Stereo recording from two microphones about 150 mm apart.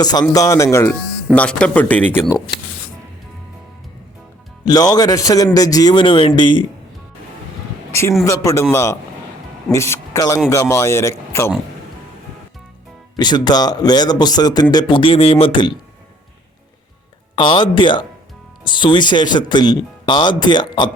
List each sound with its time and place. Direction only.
0.0 s speech: 25° left (ahead or behind)
1.4 s speech: 5° left (ahead or behind)
4.6 s speech: 25° left (ahead or behind)
8.2 s speech: 20° left (ahead or behind)
13.1 s speech: 30° left (ahead or behind)
17.3 s speech: 35° left (ahead or behind)